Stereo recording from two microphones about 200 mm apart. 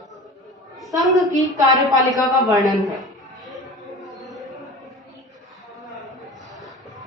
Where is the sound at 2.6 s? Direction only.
Centre (ahead or behind).